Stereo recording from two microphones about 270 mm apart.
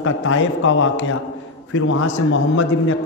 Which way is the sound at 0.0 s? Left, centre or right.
Left.